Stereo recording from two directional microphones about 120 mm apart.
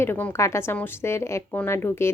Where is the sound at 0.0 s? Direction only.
15° left (ahead or behind).